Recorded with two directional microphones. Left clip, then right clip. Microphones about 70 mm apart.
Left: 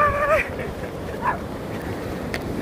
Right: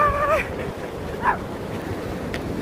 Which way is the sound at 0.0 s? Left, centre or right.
Centre.